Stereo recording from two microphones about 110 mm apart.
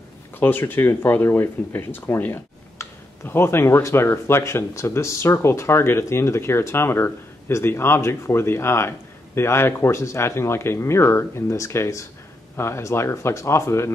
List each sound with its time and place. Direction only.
0.4 s speech: 20° left (ahead or behind)